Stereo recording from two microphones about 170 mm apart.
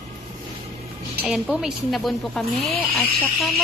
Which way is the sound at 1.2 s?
Centre (ahead or behind).